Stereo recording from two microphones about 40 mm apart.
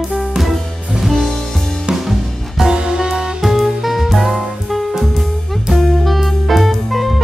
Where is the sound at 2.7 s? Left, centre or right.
Centre.